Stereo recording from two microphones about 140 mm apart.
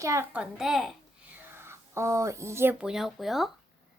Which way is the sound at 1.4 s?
15° right (ahead or behind).